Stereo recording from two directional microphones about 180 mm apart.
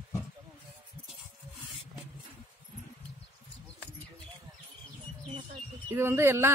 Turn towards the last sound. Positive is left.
turn(degrees=-15)  # may be behind; listen again after turning